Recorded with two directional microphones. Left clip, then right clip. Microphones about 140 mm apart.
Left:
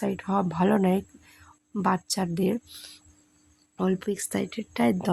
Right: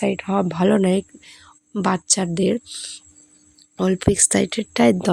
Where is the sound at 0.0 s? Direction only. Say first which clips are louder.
Right 6 dB; 5° right (ahead or behind).